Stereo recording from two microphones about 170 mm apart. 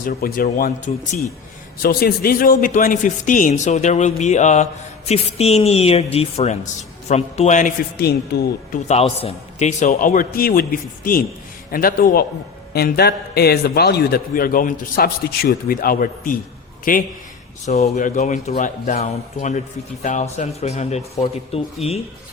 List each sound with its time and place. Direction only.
0.0 s a man's voice: 60° left (ahead or behind)
1.8 s a man's voice: 60° left (ahead or behind); by 7.7 s 45° left (ahead or behind)
7.9 s speech: 70° left (ahead or behind)
8.9 s a man's voice: 35° left (ahead or behind)